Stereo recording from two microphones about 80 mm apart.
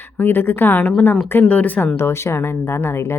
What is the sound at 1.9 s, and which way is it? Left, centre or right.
Speech, left.